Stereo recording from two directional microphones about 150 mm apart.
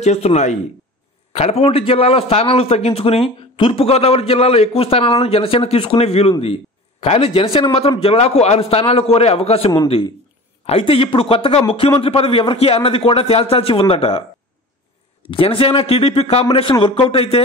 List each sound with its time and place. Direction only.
0.0 s a man's voice: 45° left (ahead or behind)
15.2 s a man's voice: 35° left (ahead or behind)